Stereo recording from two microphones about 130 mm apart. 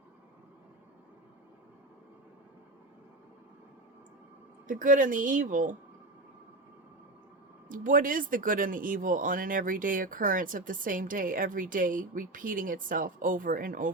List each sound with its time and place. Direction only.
4.7 s speech: 90° right
7.7 s speech: 90° right